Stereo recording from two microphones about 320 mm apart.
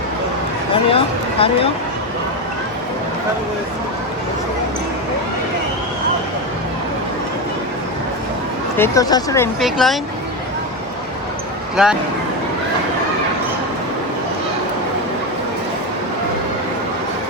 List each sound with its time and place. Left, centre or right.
0.7 s speech: centre
8.8 s speech: centre
11.8 s speech: centre